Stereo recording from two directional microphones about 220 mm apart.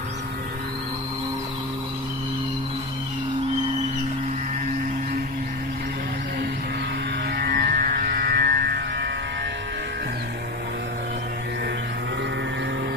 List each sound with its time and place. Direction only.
7.3 s music: 40° right (ahead or behind)